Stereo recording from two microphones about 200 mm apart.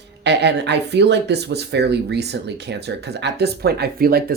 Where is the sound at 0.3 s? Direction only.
60° right (ahead or behind).